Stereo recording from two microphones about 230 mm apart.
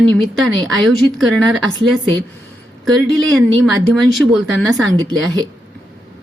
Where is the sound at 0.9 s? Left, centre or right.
Centre.